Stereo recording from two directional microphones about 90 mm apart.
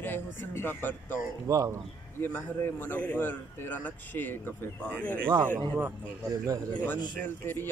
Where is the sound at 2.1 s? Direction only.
25° left (ahead or behind).